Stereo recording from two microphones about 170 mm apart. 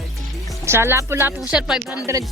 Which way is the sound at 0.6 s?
15° right (ahead or behind).